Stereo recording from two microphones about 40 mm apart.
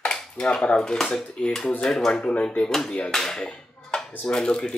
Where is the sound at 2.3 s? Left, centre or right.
Left.